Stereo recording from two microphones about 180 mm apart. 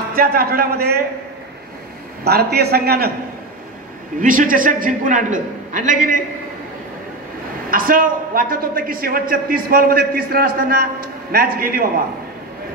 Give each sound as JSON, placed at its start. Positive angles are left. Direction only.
{"t": 0.1, "sound": "a man's voice", "side_deg": -55}
{"t": 2.2, "sound": "a man's voice", "side_deg": -60}
{"t": 4.2, "sound": "a woman's voice", "side_deg": -50}
{"t": 7.7, "sound": "a woman's voice", "side_deg": -50}